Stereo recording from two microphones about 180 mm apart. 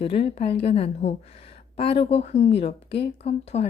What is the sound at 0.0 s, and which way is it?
Speech, 35° left (ahead or behind).